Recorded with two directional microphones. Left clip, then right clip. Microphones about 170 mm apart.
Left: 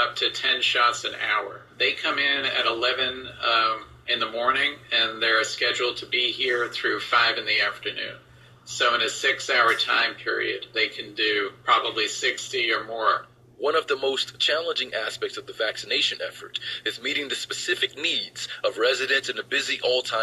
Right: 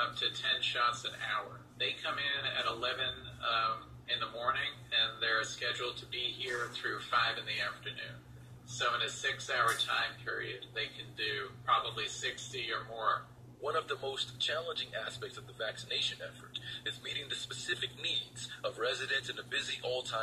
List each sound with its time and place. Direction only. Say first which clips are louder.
0.0 s speech: left 10 dB; 15° left (ahead or behind)